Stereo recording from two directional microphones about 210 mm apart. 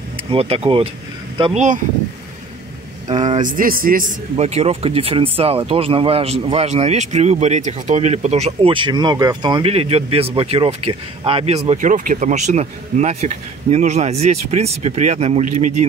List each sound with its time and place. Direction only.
0.3 s a man's voice: 25° right (ahead or behind)
3.1 s a man's voice: 35° right (ahead or behind)